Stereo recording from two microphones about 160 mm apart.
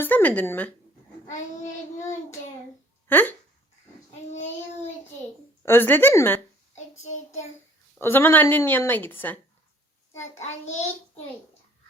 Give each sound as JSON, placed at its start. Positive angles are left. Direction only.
{"t": 0.0, "sound": "speech", "side_deg": 10}
{"t": 3.1, "sound": "a woman's voice", "side_deg": 10}
{"t": 5.6, "sound": "a woman's voice", "side_deg": 15}
{"t": 7.9, "sound": "a woman's voice", "side_deg": 15}
{"t": 10.4, "sound": "child singing", "side_deg": 45}